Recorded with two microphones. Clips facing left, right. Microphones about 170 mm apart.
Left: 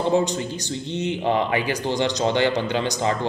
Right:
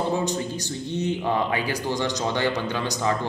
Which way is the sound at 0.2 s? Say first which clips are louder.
Left 2 dB; 20° left (ahead or behind).